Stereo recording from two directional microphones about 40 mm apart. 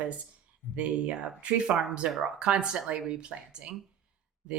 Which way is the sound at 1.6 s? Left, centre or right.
Centre.